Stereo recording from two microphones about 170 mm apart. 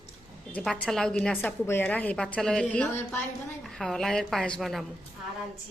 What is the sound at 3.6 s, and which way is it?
A woman's voice, centre (ahead or behind).